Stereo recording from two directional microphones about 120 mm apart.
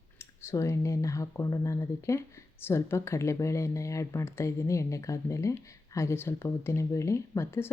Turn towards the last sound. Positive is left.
turn(degrees=20)  # may be behind; listen again after turning